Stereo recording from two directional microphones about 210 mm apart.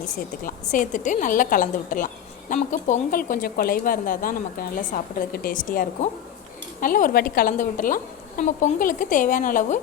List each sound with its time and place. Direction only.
0.0 s a woman's voice: 35° left (ahead or behind)